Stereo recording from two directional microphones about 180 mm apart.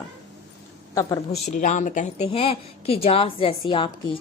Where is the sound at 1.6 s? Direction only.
45° left (ahead or behind); by 3.9 s 30° left (ahead or behind).